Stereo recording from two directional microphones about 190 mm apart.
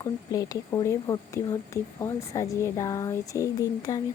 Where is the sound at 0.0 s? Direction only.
20° left (ahead or behind).